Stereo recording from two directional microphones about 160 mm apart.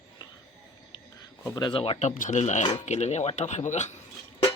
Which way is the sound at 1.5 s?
30° left (ahead or behind).